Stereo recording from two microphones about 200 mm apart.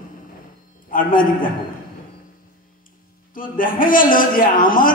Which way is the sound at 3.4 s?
45° left (ahead or behind).